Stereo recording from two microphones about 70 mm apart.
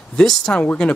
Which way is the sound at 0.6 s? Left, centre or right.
Centre.